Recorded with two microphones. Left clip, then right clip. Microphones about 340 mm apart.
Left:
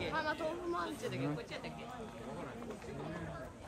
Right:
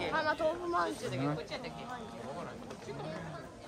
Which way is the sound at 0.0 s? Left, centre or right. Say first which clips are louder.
Right 5 dB; right.